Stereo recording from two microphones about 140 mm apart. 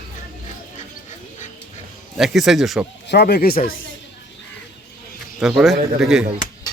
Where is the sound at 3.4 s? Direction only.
90° left.